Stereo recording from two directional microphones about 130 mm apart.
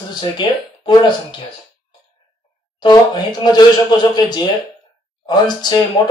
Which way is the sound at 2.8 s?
35° left (ahead or behind).